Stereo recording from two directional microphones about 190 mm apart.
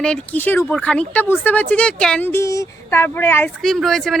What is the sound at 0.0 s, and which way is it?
Speech, 5° left (ahead or behind).